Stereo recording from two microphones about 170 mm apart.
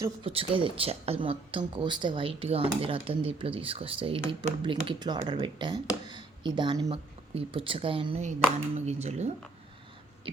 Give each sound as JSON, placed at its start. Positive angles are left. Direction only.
{"t": 0.2, "sound": "a woman's voice", "side_deg": -35}